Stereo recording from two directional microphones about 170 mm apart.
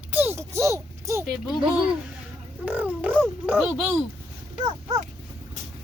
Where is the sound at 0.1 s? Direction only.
10° right (ahead or behind).